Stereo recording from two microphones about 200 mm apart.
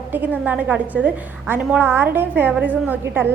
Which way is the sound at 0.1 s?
10° right (ahead or behind).